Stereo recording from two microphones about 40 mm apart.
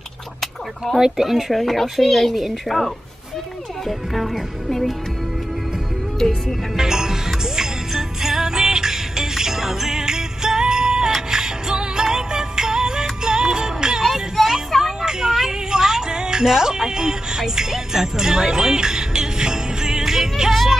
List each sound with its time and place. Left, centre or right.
0.9 s speech: centre
1.5 s speech: centre
6.8 s music: centre
14.0 s vehicle: centre
15.3 s music: centre